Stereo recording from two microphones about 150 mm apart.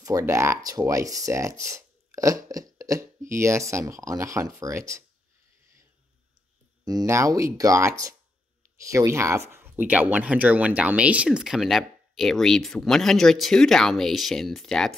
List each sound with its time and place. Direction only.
0.0 s speech: 20° right (ahead or behind)
6.8 s speech: 25° right (ahead or behind); by 15.0 s centre (ahead or behind)